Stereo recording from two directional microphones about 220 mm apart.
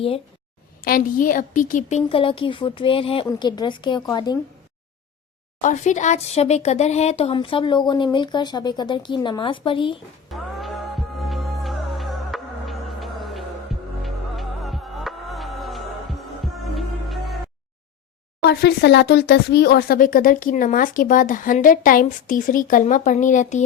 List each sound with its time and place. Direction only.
0.9 s speech: 40° left (ahead or behind); by 4.4 s 20° left (ahead or behind)
5.6 s speech: 35° left (ahead or behind)
10.2 s music: centre (ahead or behind)
18.4 s speech: 50° left (ahead or behind); by 23.6 s 35° left (ahead or behind)